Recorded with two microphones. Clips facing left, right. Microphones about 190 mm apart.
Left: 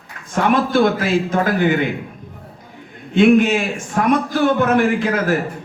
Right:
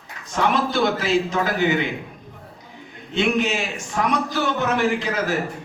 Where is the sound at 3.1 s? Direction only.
50° left (ahead or behind).